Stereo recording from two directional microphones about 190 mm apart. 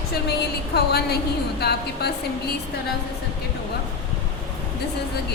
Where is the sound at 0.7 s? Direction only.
55° left (ahead or behind).